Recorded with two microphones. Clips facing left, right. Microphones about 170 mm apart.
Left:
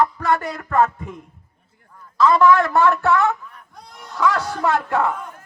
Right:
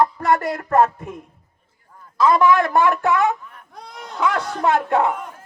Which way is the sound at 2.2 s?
20° right (ahead or behind).